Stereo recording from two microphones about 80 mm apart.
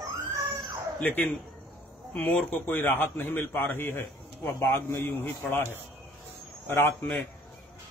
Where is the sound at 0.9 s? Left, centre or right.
Centre.